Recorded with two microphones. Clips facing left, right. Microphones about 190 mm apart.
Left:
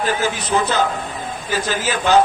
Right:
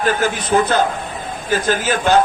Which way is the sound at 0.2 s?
50° right (ahead or behind).